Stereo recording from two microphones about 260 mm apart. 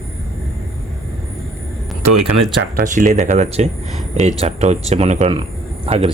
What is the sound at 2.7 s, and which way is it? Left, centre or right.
Speech, right.